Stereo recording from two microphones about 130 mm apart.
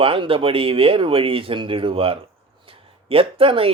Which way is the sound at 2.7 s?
45° right (ahead or behind).